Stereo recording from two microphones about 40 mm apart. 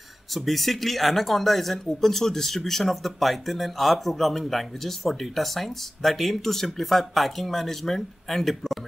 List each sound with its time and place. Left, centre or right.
0.3 s speech: centre